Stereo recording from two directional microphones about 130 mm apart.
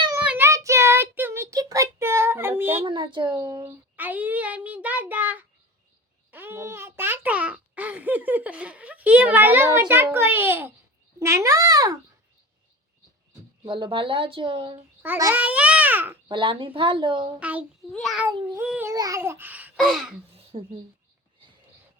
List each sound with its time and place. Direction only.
0.2 s child singing: 15° right (ahead or behind)
2.8 s speech: 40° right (ahead or behind)
3.9 s a child's voice: 15° right (ahead or behind)
11.2 s babbling: 20° right (ahead or behind)
13.7 s speech: 40° right (ahead or behind)
15.0 s a child's voice: 15° right (ahead or behind)
16.3 s speech: 40° right (ahead or behind)
17.4 s a child's voice: 10° right (ahead or behind)
17.9 s a sound: centre (ahead or behind)
18.6 s a child's voice: 10° right (ahead or behind)
18.9 s babbling: 25° right (ahead or behind)
19.7 s a sound: centre (ahead or behind)
20.3 s a sound: 50° right (ahead or behind)